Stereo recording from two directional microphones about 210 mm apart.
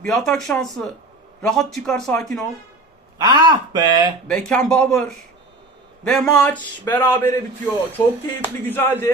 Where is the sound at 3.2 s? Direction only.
20° right (ahead or behind).